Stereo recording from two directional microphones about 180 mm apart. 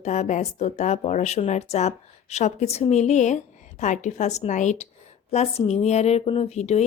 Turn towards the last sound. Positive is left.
turn(degrees=35)  # may be behind; listen again after turning